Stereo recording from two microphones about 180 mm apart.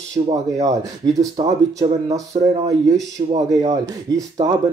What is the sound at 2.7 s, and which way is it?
Speech, 20° right (ahead or behind).